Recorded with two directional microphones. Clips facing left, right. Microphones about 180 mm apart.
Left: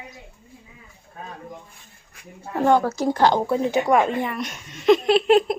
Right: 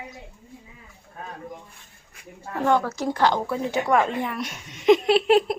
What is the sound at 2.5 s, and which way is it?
Speech, 35° left (ahead or behind).